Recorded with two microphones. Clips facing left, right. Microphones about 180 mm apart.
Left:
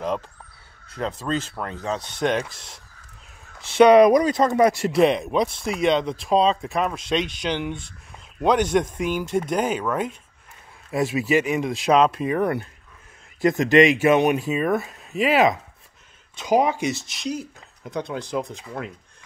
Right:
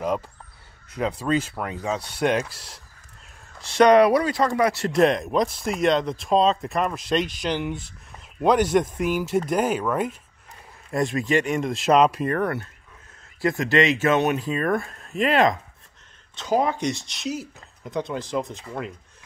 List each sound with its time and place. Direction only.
0.9 s speech: 10° right (ahead or behind); by 4.8 s 20° left (ahead or behind)
4.8 s speech: 5° left (ahead or behind)
12.3 s speech: 15° left (ahead or behind)